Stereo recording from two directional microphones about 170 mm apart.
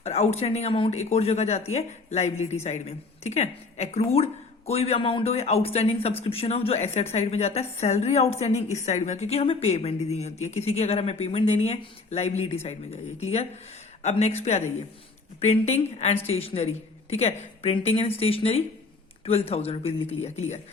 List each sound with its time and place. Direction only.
0.0 s speech: 40° left (ahead or behind)